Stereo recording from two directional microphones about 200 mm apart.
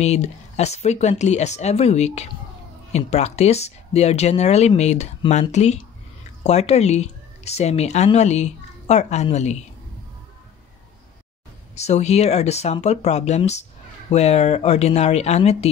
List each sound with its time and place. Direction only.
0.0 s speech: 35° left (ahead or behind)
11.7 s speech: 35° left (ahead or behind)